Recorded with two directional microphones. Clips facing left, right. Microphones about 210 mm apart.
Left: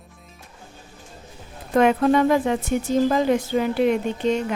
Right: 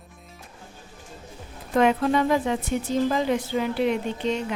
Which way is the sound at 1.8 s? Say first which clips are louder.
Left 3 dB; 50° left (ahead or behind).